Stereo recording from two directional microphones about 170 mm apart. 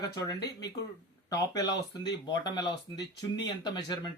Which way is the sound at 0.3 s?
75° left (ahead or behind).